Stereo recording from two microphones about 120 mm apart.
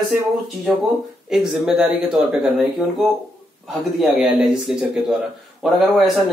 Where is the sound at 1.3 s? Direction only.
5° right (ahead or behind).